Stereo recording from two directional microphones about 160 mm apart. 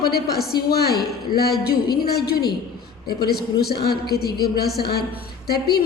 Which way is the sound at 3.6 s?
80° left.